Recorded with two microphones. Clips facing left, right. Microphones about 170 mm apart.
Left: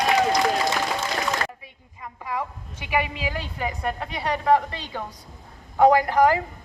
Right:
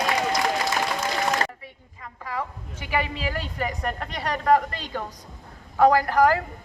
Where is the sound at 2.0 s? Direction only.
15° left (ahead or behind).